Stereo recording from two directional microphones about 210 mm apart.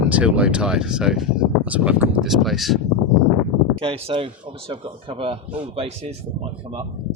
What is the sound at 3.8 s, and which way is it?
Speech, 25° right (ahead or behind).